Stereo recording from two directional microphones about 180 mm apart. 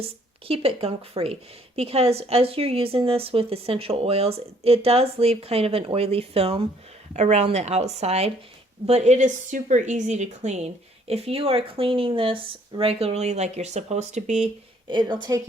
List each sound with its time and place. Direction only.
0.0 s speech: 30° right (ahead or behind)
14.8 s a woman's voice: 25° right (ahead or behind)